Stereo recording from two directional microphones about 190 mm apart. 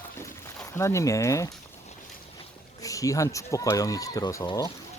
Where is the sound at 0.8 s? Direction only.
15° left (ahead or behind).